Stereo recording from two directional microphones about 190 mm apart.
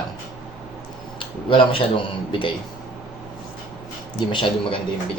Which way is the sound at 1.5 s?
25° left (ahead or behind).